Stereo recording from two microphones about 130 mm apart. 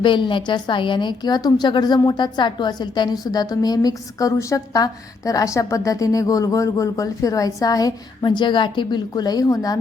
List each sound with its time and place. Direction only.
0.0 s a woman's voice: 40° left (ahead or behind)